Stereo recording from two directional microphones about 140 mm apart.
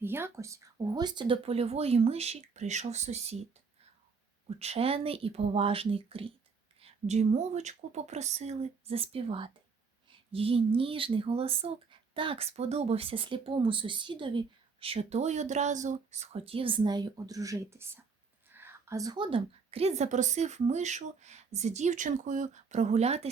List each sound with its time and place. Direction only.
0.0 s a woman's voice: 15° right (ahead or behind); by 3.4 s 50° right (ahead or behind)
4.4 s a woman's voice: 45° right (ahead or behind)
6.8 s a woman's voice: 55° right (ahead or behind)